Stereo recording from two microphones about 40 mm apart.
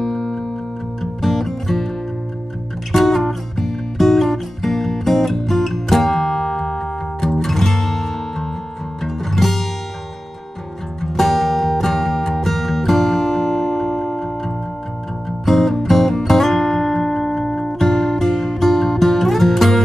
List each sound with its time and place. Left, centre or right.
0.0 s music: centre
2.9 s music: centre
11.0 s music: centre